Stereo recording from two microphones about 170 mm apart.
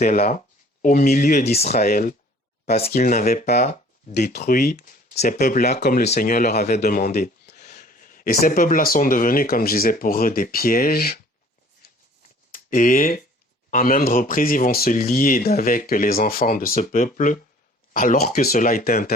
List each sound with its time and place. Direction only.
0.0 s speech: 55° left (ahead or behind)
1.8 s speech: 60° left (ahead or behind)
2.7 s speech: 40° left (ahead or behind)
4.6 s speech: 65° left (ahead or behind)
5.1 s speech: 45° left (ahead or behind); by 7.6 s 65° left (ahead or behind)
7.6 s speech: 50° left (ahead or behind)
12.5 s speech: 55° left (ahead or behind)
18.3 s speech: 60° left (ahead or behind)